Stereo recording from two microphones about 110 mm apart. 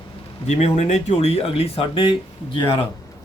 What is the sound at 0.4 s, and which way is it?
Speech, 85° left.